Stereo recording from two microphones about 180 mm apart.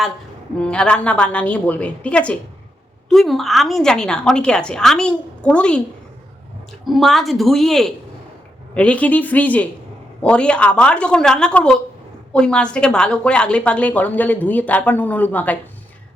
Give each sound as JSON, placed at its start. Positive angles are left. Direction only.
{"t": 0.6, "sound": "a woman's voice", "side_deg": 5}
{"t": 6.8, "sound": "a woman's voice", "side_deg": 0}